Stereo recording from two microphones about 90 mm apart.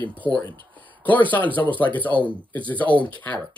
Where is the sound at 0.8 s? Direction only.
20° left (ahead or behind).